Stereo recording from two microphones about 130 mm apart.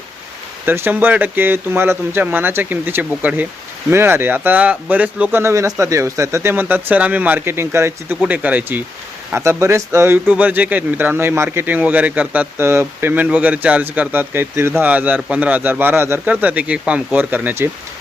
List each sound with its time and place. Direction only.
0.6 s speech: 15° right (ahead or behind)